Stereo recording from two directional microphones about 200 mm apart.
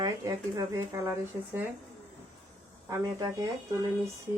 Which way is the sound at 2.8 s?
20° right (ahead or behind).